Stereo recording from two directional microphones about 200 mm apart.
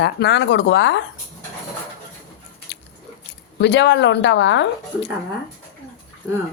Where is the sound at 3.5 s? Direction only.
60° left (ahead or behind).